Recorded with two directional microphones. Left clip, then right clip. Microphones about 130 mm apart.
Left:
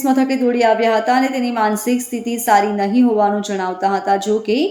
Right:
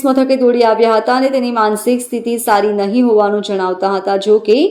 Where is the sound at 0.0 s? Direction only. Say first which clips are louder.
Right 5 dB; 15° right (ahead or behind).